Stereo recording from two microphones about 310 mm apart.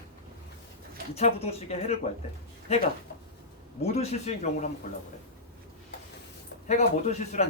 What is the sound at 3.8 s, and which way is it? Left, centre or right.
Speech, left.